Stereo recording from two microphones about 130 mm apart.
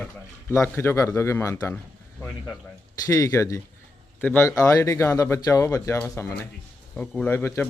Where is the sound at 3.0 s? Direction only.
25° left (ahead or behind).